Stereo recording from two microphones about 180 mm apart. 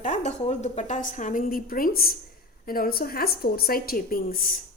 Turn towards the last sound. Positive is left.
turn(degrees=55)  # may be behind; listen again after turning